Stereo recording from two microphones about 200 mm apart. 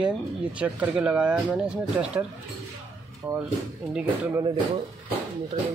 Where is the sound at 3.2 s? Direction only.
10° right (ahead or behind).